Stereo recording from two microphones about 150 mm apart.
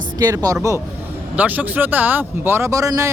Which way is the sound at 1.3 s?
10° right (ahead or behind).